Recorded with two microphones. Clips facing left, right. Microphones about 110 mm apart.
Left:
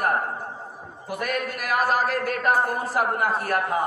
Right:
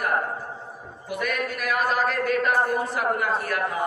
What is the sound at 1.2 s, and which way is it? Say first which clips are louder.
A man's voice: even; 40° left (ahead or behind).